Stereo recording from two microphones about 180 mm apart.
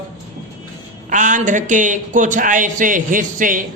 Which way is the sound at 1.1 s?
45° right (ahead or behind).